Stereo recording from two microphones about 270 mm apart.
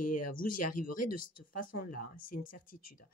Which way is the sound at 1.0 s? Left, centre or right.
Left.